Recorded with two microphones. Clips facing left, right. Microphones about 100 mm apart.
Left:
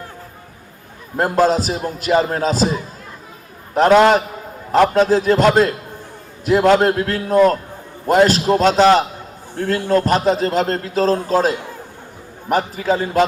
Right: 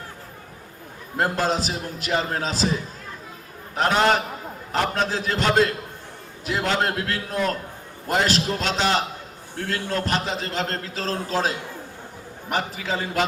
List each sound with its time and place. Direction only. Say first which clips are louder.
1.1 s a man's voice: left 7 dB; 45° left (ahead or behind)
4.7 s a man's voice: left 11 dB; 40° left (ahead or behind)